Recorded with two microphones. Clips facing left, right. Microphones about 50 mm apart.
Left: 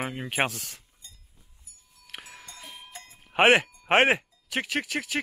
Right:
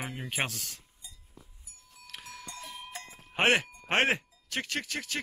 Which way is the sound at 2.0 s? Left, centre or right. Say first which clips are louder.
Left 2 dB; centre.